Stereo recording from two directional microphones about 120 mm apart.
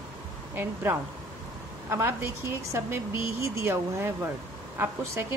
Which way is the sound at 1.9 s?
20° right (ahead or behind).